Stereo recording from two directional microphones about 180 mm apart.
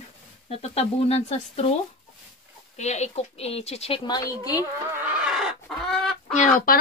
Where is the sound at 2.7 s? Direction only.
40° left (ahead or behind); by 4.7 s 20° left (ahead or behind).